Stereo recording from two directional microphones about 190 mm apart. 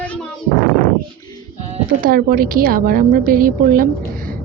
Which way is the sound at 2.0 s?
50° right (ahead or behind).